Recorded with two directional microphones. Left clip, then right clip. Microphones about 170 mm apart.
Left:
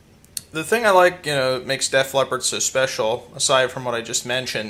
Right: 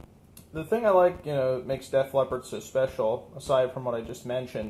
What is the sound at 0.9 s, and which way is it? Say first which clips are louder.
Speech: left 6 dB; 20° left (ahead or behind).